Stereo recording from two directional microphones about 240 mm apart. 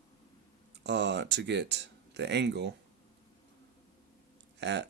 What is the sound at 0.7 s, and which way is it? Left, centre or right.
Speech, right.